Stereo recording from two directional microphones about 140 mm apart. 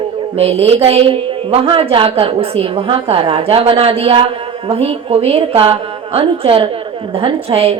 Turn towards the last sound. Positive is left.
turn(degrees=-45)  # may be behind; listen again after turning